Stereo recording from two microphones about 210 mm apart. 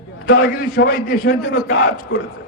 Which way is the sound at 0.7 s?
50° left (ahead or behind).